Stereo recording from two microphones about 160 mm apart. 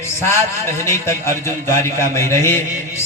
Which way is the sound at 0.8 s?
15° left (ahead or behind).